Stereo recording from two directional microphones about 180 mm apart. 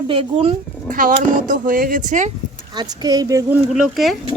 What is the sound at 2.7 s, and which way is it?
Speech, 25° right (ahead or behind).